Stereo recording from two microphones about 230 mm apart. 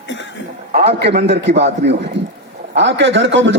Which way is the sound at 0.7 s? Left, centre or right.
Right.